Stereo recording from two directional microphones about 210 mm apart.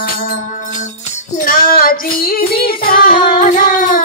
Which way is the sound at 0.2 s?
45° left (ahead or behind).